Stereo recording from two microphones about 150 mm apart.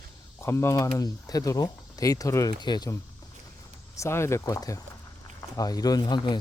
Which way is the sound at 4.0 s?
15° left (ahead or behind).